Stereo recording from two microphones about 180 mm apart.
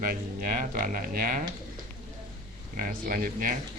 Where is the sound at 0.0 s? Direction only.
50° right (ahead or behind).